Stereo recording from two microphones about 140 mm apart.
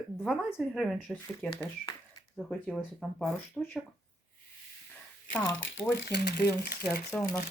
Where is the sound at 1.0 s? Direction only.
10° left (ahead or behind).